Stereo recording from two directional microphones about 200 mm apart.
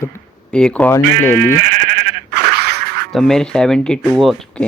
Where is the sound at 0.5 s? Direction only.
5° left (ahead or behind).